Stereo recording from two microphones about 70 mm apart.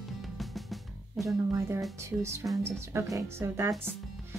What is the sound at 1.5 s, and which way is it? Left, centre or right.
Speech, right.